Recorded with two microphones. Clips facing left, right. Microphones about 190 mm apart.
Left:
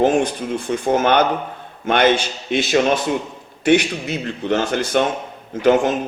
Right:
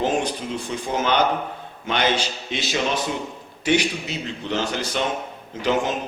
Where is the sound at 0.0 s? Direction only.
55° left (ahead or behind).